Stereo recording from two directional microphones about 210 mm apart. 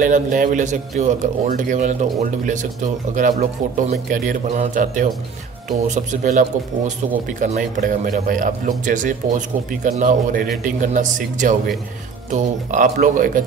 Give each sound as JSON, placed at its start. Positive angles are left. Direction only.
{"t": 0.0, "sound": "speech", "side_deg": -40}